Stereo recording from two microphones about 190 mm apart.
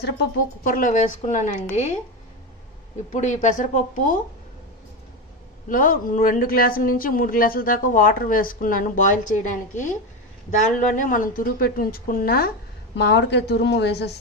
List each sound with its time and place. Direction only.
0.7 s a woman's voice: 40° left (ahead or behind)
3.1 s a woman's voice: 40° left (ahead or behind)
5.7 s speech: 45° left (ahead or behind); by 14.1 s 60° left (ahead or behind)